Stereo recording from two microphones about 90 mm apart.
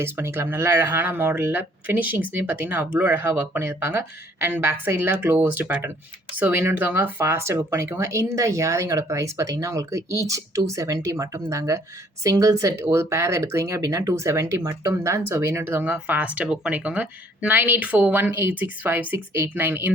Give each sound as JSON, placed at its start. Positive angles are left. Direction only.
{"t": 0.0, "sound": "speech", "side_deg": -25}